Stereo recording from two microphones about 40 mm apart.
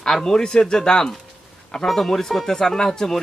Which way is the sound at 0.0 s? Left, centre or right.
Centre.